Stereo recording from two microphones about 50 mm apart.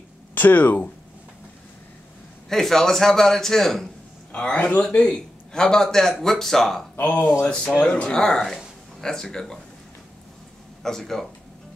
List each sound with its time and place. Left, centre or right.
0.3 s speech: left
2.5 s a man's voice: centre
4.3 s a man's voice: left; by 6.9 s centre
7.0 s speech: left
7.8 s speech: left
8.1 s a man's voice: centre
10.8 s a man's voice: centre